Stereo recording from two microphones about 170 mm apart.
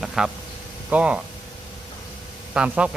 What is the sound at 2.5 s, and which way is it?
Speech, 5° right (ahead or behind).